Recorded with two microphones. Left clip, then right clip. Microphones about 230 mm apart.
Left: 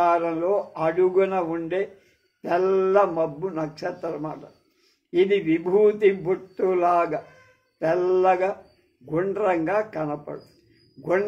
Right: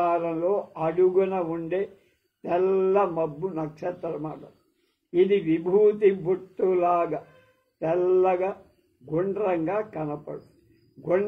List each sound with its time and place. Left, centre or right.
0.0 s speech: left